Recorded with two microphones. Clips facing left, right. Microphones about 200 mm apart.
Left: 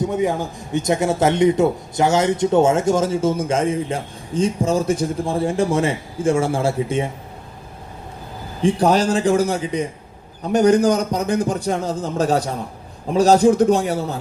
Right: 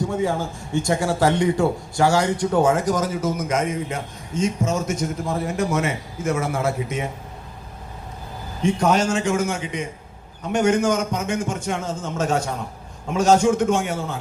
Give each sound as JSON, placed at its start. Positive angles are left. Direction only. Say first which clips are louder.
{"t": 0.0, "sound": "a man's voice", "louder": "left 3 dB", "side_deg": 20}
{"t": 8.6, "sound": "a man's voice", "louder": "left 3 dB", "side_deg": 35}